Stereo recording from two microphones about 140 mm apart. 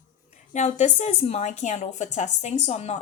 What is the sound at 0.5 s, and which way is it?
A woman's voice, 55° left (ahead or behind).